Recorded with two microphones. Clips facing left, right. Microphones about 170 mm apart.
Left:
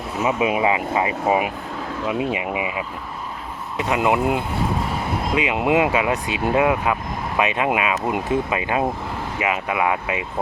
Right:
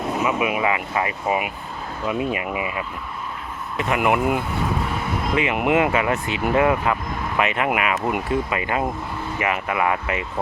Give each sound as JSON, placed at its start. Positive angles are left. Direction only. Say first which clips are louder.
{"t": 0.3, "sound": "speech", "louder": "left 5 dB", "side_deg": 30}
{"t": 2.0, "sound": "speech", "louder": "even", "side_deg": 20}